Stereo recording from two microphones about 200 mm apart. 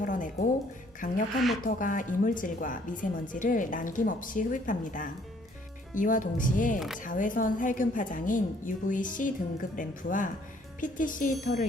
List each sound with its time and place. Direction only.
0.0 s a sound: 40° left (ahead or behind)
1.0 s a woman's voice: 40° left (ahead or behind)
6.7 s speech: centre (ahead or behind)
7.0 s a woman's voice: 40° left (ahead or behind)